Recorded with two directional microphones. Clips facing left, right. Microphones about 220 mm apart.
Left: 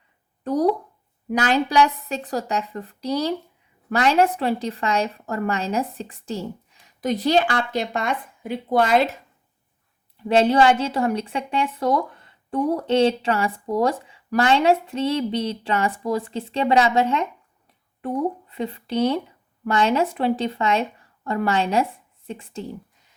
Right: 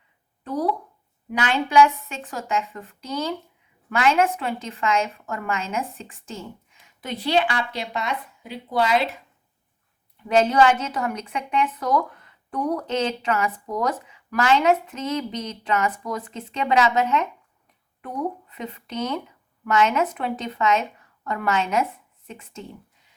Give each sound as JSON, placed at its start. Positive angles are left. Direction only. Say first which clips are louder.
{"t": 0.4, "sound": "a woman's voice", "louder": "left 5 dB", "side_deg": 45}
{"t": 10.2, "sound": "a woman's voice", "louder": "left 2 dB", "side_deg": 30}